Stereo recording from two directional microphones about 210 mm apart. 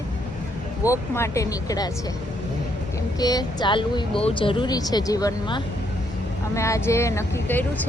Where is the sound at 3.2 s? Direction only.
20° left (ahead or behind).